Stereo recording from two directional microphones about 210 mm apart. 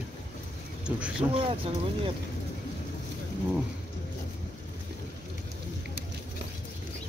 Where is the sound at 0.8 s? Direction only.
5° right (ahead or behind).